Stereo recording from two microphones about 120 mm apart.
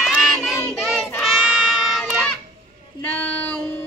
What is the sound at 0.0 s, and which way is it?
Child singing, centre (ahead or behind).